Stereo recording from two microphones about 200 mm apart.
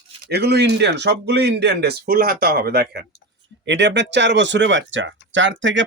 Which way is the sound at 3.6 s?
60° right (ahead or behind).